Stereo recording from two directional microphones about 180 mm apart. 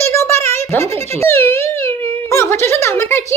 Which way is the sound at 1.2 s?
15° left (ahead or behind).